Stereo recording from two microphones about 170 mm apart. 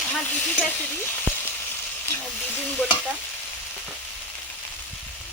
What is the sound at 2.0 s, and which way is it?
Stir, 10° left (ahead or behind).